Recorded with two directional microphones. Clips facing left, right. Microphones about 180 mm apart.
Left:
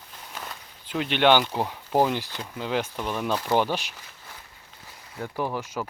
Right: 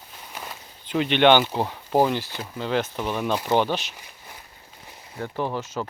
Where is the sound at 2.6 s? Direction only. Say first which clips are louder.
Right 3 dB; 10° left (ahead or behind).